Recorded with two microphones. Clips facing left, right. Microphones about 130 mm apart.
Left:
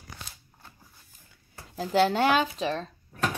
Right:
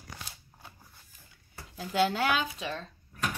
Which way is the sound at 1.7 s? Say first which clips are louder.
Left 4 dB; 35° left (ahead or behind).